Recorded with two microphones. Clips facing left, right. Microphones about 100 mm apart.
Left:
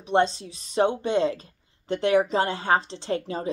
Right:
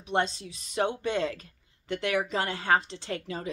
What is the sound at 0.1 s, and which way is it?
A woman's voice, 30° left (ahead or behind).